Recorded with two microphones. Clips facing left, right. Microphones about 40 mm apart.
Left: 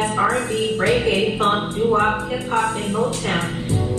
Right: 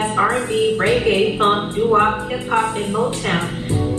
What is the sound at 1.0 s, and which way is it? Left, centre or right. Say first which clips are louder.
Speech: right 3 dB; centre.